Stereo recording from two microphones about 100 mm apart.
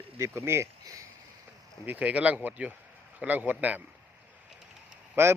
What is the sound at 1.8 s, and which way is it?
Speech, 15° right (ahead or behind).